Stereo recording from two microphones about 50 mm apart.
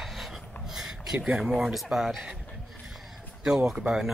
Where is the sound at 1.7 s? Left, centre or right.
Centre.